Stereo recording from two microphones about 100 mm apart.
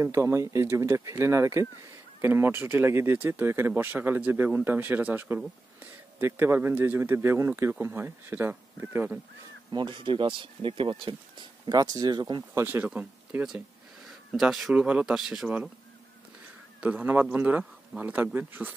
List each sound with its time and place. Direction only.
0.0 s speech: 30° right (ahead or behind)
9.7 s speech: 55° right (ahead or behind)
12.6 s speech: 15° right (ahead or behind)
16.8 s speech: 15° right (ahead or behind)